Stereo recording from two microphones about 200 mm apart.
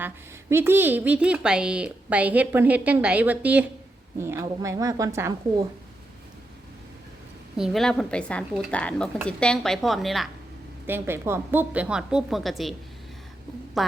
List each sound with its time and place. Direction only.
0.5 s a woman's voice: 10° right (ahead or behind)
7.5 s a woman's voice: centre (ahead or behind)
10.8 s a woman's voice: 10° right (ahead or behind)
13.8 s a woman's voice: centre (ahead or behind)